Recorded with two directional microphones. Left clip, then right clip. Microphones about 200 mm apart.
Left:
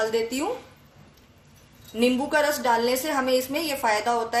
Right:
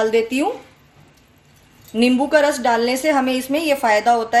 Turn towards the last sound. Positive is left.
turn(degrees=-45)  # may be behind; listen again after turning